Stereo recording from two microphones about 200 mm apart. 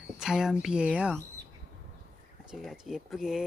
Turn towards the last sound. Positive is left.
turn(degrees=0)  # may be behind; listen again after turning